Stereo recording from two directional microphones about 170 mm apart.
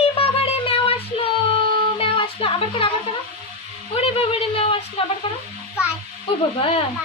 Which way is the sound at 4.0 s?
35° left (ahead or behind).